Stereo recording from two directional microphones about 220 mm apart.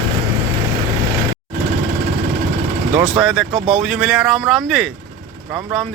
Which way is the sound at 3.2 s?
Centre (ahead or behind).